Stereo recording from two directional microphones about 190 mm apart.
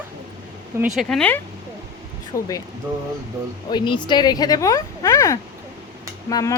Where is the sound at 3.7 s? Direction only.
25° left (ahead or behind).